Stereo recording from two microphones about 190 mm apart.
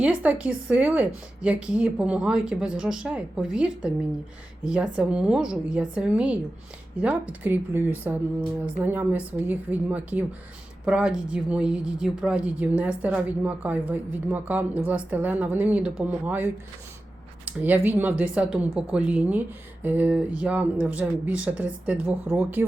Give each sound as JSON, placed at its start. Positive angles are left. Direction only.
{"t": 0.0, "sound": "a woman's voice", "side_deg": -10}